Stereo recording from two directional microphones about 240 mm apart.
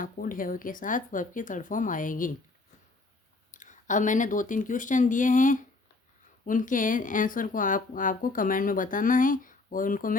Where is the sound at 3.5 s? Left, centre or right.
Left.